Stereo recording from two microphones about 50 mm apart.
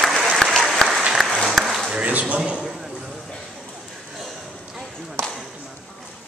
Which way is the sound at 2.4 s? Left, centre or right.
Centre.